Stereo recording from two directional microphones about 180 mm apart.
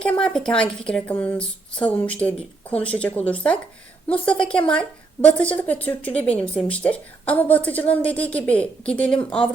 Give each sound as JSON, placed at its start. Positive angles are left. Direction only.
{"t": 0.0, "sound": "a woman's voice", "side_deg": 5}